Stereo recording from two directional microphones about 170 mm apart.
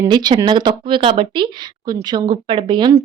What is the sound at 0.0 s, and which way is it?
A woman's voice, 25° right (ahead or behind).